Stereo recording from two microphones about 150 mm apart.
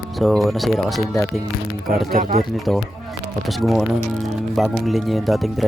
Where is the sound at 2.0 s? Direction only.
80° right.